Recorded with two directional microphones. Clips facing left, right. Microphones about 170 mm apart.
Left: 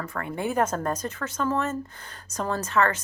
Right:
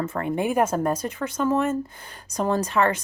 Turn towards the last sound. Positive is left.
turn(degrees=-15)  # may be behind; listen again after turning